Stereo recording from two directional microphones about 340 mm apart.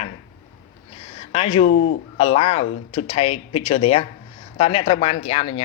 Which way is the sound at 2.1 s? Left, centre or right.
Centre.